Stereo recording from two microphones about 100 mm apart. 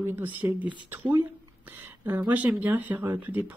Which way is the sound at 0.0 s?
20° right (ahead or behind).